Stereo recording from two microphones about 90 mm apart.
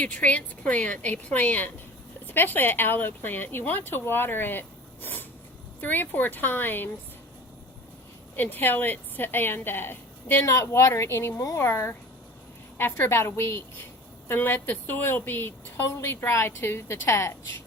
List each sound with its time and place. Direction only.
0.0 s a woman's voice: 15° left (ahead or behind)
5.8 s a woman's voice: 20° left (ahead or behind)
8.4 s a woman's voice: 20° left (ahead or behind)